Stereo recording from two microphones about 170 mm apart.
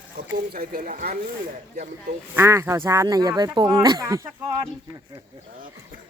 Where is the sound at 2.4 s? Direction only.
15° right (ahead or behind).